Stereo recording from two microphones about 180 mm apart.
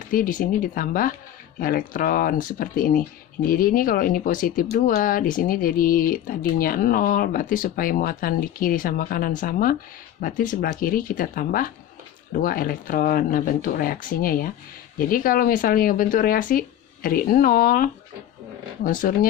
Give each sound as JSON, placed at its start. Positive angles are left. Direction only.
{"t": 0.1, "sound": "speech", "side_deg": 50}